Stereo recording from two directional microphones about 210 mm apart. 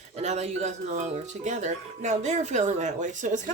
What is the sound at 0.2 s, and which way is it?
Speech, 30° right (ahead or behind).